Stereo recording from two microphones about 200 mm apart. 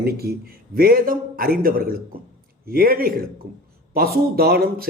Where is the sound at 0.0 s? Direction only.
50° right (ahead or behind).